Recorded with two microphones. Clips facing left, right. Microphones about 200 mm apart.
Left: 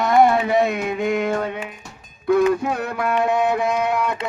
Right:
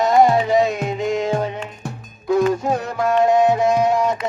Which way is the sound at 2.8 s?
60° left (ahead or behind).